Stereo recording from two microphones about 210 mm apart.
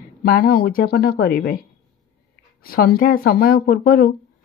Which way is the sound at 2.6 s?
45° left (ahead or behind).